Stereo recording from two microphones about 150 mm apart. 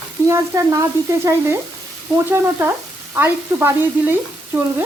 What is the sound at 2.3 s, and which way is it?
Frying, 15° right (ahead or behind).